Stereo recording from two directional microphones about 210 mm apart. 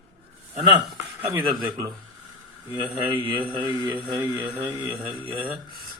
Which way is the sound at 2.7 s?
5° right (ahead or behind).